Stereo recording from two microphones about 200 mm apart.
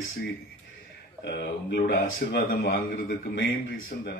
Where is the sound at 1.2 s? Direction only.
60° left (ahead or behind).